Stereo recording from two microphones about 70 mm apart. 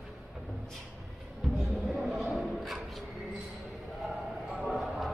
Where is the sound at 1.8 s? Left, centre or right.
Centre.